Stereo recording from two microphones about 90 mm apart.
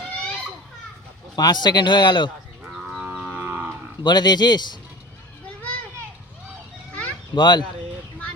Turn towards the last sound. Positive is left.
turn(degrees=55)  # may be behind; listen again after turning